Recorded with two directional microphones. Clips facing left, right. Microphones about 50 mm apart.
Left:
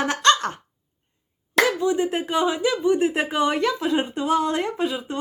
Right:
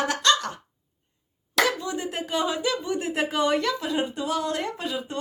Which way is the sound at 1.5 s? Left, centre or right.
Left.